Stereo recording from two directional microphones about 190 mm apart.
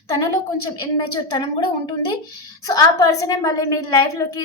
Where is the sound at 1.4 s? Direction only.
25° left (ahead or behind).